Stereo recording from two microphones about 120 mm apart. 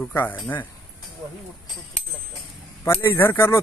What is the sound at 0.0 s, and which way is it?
Speech, 15° left (ahead or behind).